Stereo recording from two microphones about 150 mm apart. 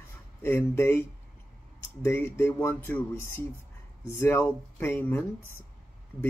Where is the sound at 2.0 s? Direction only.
15° left (ahead or behind).